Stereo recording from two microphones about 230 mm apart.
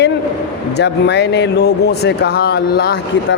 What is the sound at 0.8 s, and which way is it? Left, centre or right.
Speech, left.